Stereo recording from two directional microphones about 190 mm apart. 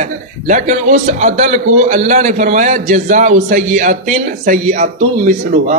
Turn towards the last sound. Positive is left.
turn(degrees=-40)  # may be behind; listen again after turning